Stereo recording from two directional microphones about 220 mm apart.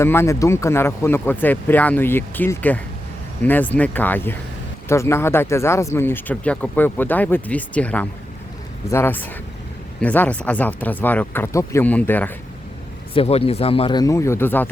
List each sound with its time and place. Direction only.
0.0 s speech: 10° left (ahead or behind)
13.1 s speech: 25° left (ahead or behind); by 14.7 s 10° left (ahead or behind)